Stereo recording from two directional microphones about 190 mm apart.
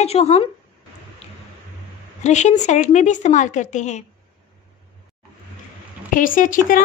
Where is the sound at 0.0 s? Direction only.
35° left (ahead or behind).